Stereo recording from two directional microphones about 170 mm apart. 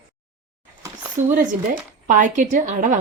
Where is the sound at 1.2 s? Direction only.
45° right (ahead or behind).